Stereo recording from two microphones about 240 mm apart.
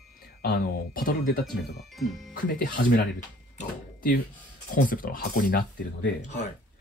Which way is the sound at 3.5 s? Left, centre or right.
Left.